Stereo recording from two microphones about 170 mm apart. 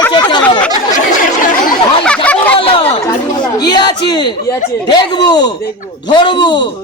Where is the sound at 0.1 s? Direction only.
25° left (ahead or behind).